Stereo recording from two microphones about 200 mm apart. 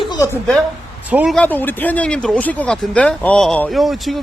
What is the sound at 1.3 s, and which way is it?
Speech, 10° left (ahead or behind).